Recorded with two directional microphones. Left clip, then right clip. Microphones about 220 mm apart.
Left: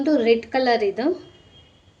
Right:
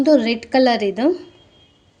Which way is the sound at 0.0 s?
45° right (ahead or behind).